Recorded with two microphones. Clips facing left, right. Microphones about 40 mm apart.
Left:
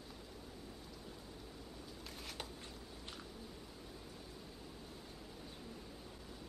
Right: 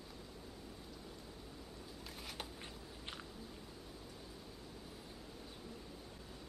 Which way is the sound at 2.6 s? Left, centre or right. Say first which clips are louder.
Right 1 dB; right.